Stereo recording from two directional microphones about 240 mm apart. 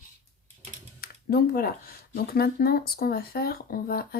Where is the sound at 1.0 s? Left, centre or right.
Left.